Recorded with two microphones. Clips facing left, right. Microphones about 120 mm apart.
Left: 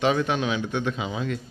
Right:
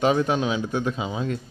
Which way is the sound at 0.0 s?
35° right (ahead or behind).